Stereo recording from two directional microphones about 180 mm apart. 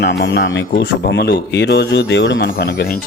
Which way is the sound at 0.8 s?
70° left (ahead or behind).